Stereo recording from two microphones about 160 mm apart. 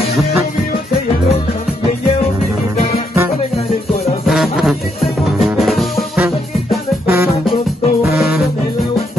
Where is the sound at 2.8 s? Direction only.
70° left (ahead or behind).